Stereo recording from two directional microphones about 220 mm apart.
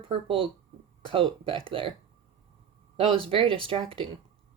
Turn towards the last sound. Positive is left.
turn(degrees=-25)  # may be behind; listen again after turning